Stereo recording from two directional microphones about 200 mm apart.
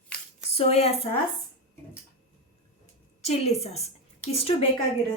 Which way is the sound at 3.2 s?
30° left (ahead or behind).